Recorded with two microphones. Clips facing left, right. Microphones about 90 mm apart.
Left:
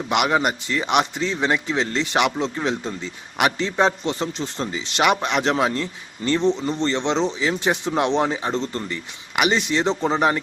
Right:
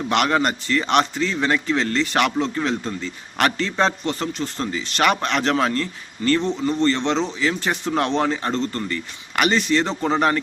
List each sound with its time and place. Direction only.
0.1 s a man's voice: 10° left (ahead or behind)